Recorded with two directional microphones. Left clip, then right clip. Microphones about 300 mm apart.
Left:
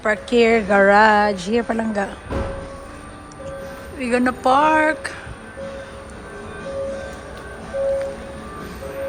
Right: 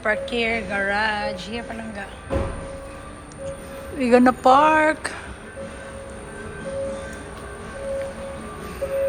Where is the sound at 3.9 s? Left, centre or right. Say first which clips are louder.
Right 4 dB; centre.